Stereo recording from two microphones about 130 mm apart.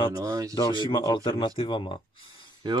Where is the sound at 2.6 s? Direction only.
35° right (ahead or behind).